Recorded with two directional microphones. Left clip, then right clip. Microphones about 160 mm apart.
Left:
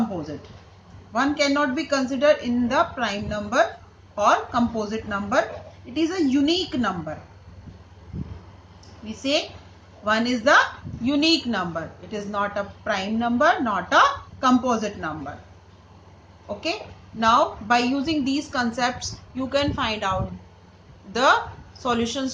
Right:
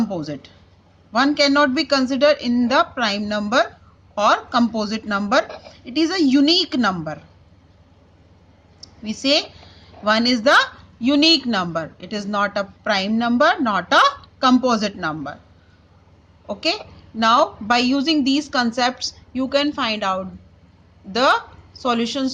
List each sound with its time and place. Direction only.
1.1 s a woman's voice: 80° right
9.0 s a woman's voice: 80° right
16.6 s a woman's voice: 75° right (ahead or behind)